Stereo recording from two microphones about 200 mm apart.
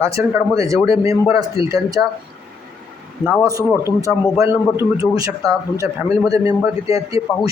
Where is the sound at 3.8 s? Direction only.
15° right (ahead or behind).